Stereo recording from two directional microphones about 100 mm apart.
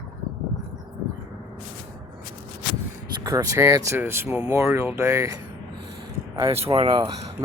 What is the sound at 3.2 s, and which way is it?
Speech, 35° right (ahead or behind).